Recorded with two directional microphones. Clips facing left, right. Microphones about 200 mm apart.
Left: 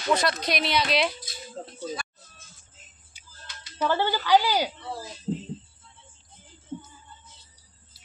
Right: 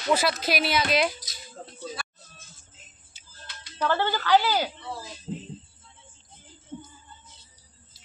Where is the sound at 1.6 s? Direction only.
25° left (ahead or behind).